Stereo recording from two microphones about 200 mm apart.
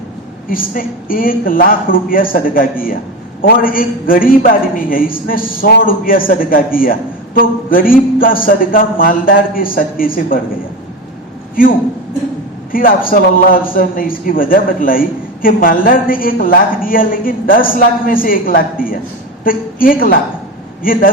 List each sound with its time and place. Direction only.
0.4 s a man's voice: 45° left (ahead or behind)
12.7 s a man's voice: 45° left (ahead or behind)